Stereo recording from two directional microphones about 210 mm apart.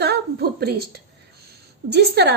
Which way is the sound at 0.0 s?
50° right (ahead or behind).